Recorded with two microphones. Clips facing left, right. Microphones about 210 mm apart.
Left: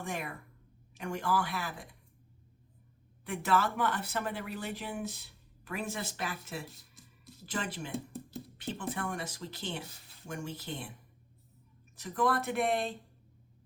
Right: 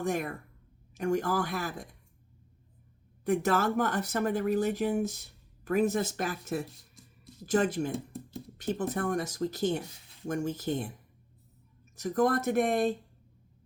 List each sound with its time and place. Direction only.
0.0 s speech: 45° right (ahead or behind)
3.2 s speech: 45° right (ahead or behind)
7.0 s music: centre (ahead or behind)
7.4 s speech: 45° right (ahead or behind)
11.9 s speech: 45° right (ahead or behind)